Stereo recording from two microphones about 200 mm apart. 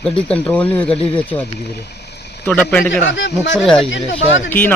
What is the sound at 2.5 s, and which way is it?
Speech, 5° left (ahead or behind).